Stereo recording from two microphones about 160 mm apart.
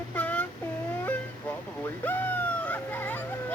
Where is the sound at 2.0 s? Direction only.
10° left (ahead or behind).